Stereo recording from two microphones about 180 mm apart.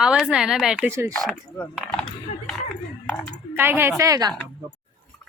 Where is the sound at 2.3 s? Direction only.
40° left (ahead or behind).